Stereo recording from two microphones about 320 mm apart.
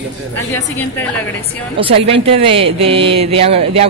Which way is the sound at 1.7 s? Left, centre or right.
Centre.